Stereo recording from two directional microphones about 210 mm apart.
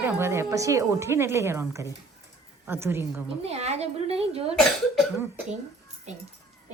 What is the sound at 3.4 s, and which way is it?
A woman's voice, 30° right (ahead or behind).